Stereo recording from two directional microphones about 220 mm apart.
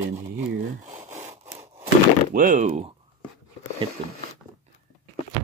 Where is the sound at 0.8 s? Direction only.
30° right (ahead or behind).